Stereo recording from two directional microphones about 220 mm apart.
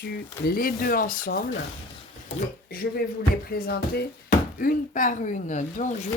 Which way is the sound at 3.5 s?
45° left (ahead or behind).